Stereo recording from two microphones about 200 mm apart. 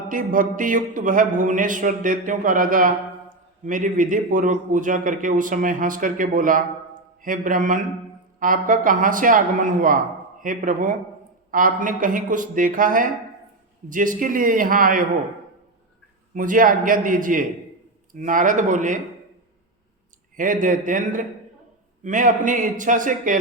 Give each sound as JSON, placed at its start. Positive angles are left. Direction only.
{"t": 0.1, "sound": "a man's voice", "side_deg": -45}
{"t": 16.3, "sound": "a man's voice", "side_deg": -40}
{"t": 20.3, "sound": "a man's voice", "side_deg": -40}